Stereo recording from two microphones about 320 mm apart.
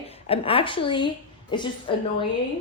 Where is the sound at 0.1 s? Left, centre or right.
Centre.